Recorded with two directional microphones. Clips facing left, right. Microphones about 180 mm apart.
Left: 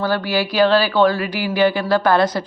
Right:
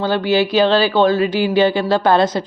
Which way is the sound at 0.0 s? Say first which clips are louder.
Right 4 dB; 20° right (ahead or behind).